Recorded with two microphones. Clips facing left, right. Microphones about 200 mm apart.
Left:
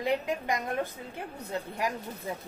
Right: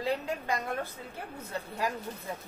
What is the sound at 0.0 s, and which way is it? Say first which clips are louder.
Speech: left 3 dB; 15° left (ahead or behind).